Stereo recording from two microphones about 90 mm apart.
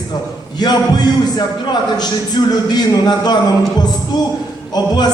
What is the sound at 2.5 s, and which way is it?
Speech, 50° left (ahead or behind).